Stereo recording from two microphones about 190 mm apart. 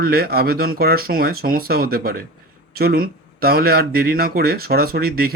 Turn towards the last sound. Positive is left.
turn(degrees=-55)  # may be behind; listen again after turning